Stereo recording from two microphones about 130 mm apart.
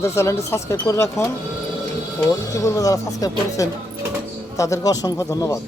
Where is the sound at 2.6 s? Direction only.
25° left (ahead or behind).